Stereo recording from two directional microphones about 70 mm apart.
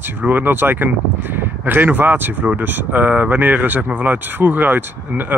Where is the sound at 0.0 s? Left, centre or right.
Right.